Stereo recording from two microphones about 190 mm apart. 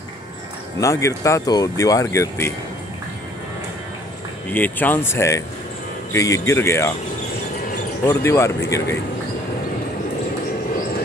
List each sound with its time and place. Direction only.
0.7 s speech: 15° left (ahead or behind)
4.5 s speech: 10° left (ahead or behind)
8.1 s speech: 15° left (ahead or behind)